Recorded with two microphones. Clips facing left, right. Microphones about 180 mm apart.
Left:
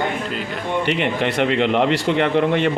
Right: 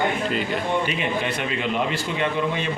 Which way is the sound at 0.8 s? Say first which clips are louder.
Left 5 dB; 70° left (ahead or behind).